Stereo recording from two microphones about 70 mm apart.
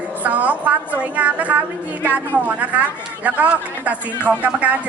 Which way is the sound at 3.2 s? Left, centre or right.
Right.